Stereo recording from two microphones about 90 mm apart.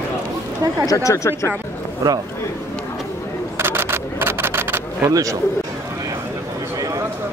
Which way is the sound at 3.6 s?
25° right (ahead or behind).